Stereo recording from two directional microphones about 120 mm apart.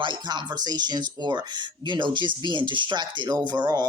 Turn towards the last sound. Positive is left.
turn(degrees=-35)  # may be behind; listen again after turning